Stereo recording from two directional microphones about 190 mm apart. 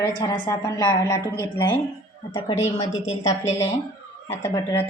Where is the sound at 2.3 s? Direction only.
30° left (ahead or behind).